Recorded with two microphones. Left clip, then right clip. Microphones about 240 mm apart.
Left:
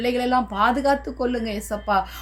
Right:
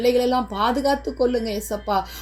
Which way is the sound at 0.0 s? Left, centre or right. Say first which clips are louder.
Right 2 dB; left.